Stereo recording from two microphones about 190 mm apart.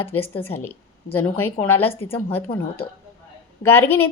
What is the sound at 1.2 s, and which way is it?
A woman's voice, 10° left (ahead or behind).